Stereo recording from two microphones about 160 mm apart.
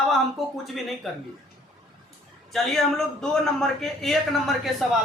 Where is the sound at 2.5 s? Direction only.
Centre (ahead or behind).